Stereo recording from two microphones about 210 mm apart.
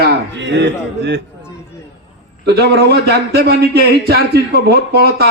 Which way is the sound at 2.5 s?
50° right (ahead or behind).